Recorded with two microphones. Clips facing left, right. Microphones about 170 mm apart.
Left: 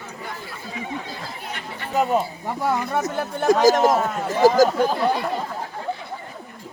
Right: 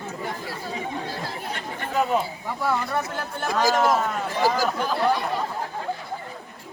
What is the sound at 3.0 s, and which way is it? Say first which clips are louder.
Speech: left 5 dB; 45° left (ahead or behind).